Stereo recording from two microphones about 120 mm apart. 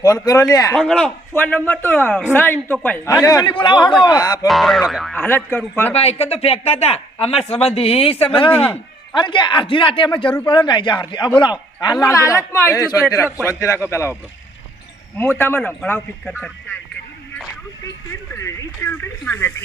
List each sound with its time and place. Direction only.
0.0 s a man's voice: 30° left (ahead or behind)
0.8 s a man's voice: 5° left (ahead or behind); by 3.4 s 25° left (ahead or behind)
3.4 s a man's voice: 40° left (ahead or behind)
4.4 s speech: centre (ahead or behind)
5.1 s a man's voice: 15° left (ahead or behind)
5.9 s a man's voice: 55° left (ahead or behind)
8.5 s a man's voice: 15° left (ahead or behind)
9.1 s a man's voice: 40° left (ahead or behind); by 14.1 s 20° left (ahead or behind)
15.2 s a man's voice: 20° left (ahead or behind)
18.1 s a man's voice: 25° left (ahead or behind)